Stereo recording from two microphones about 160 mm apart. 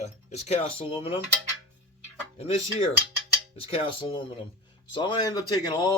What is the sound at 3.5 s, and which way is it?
Speech, 35° left (ahead or behind).